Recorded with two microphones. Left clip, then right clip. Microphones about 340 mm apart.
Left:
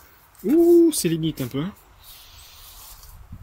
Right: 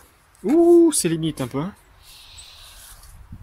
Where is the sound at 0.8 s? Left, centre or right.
Centre.